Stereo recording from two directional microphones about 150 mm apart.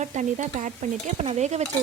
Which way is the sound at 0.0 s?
50° right (ahead or behind).